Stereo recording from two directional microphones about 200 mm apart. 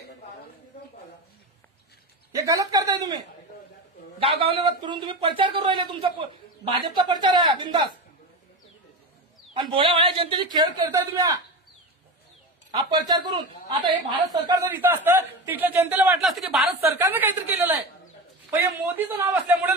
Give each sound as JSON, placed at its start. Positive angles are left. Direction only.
{"t": 2.3, "sound": "a man's voice", "side_deg": -15}
{"t": 4.2, "sound": "speech", "side_deg": -30}
{"t": 9.6, "sound": "speech", "side_deg": -25}
{"t": 12.9, "sound": "a woman's voice", "side_deg": -20}